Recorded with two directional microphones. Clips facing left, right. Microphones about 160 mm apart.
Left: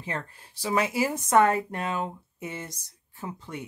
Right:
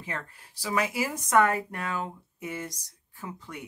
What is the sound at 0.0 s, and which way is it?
Speech, 30° left (ahead or behind).